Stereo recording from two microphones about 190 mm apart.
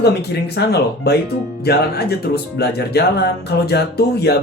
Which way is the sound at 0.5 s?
60° left (ahead or behind).